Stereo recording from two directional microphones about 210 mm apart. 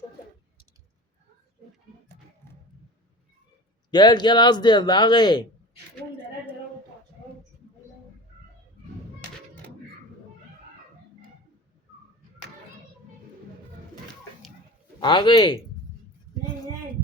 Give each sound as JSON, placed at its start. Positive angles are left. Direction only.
{"t": 3.9, "sound": "speech", "side_deg": 20}
{"t": 15.0, "sound": "speech", "side_deg": 20}